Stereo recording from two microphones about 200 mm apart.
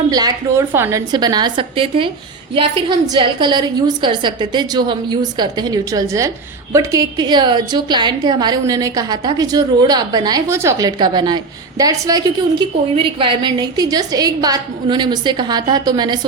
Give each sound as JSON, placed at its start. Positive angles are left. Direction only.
{"t": 0.1, "sound": "a woman's voice", "side_deg": -20}